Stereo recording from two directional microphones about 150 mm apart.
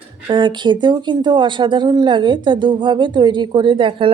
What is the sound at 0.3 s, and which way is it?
Speech, 30° right (ahead or behind).